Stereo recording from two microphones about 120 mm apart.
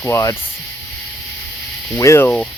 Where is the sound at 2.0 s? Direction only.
20° left (ahead or behind).